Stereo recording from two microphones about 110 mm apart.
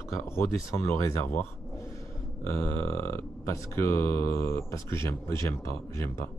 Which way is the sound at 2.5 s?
20° left (ahead or behind).